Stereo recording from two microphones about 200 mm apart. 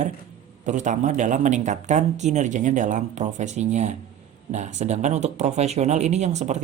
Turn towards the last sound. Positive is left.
turn(degrees=-35)  # may be behind; listen again after turning